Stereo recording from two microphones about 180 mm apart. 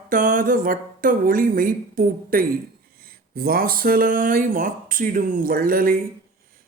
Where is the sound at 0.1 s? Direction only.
50° right (ahead or behind).